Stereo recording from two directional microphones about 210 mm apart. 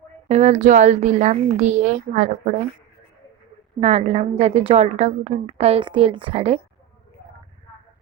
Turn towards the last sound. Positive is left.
turn(degrees=-25)  # may be behind; listen again after turning